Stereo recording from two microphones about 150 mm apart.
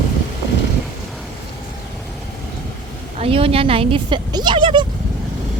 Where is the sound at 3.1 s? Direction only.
40° right (ahead or behind).